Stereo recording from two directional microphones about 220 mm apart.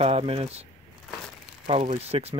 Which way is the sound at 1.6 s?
30° right (ahead or behind).